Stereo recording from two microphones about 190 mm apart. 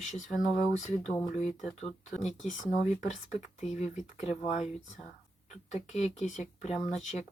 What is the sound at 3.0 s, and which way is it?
Speech, 40° left (ahead or behind).